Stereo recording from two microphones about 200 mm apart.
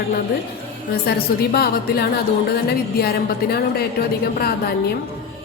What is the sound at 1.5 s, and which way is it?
A woman's voice, 55° left (ahead or behind).